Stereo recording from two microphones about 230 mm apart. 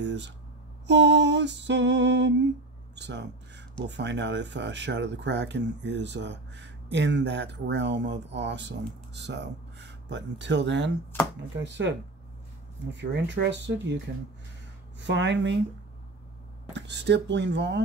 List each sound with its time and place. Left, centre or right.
0.0 s a sound: right
0.8 s speech: right
12.9 s speech: right
15.0 s speech: right
16.7 s speech: right